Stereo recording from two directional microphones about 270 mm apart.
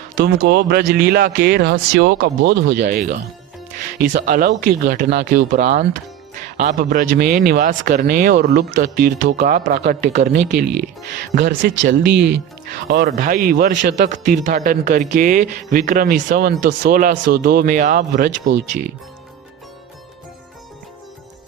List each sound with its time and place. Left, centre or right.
0.3 s a man's voice: right
2.7 s a man's voice: right
12.1 s speech: right
12.9 s a man's voice: right